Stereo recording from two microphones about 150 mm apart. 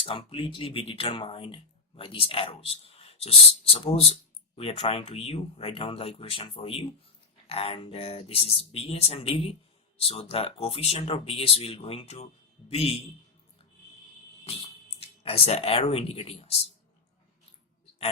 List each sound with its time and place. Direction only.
0.0 s speech: 35° left (ahead or behind)
14.4 s speech: 40° left (ahead or behind)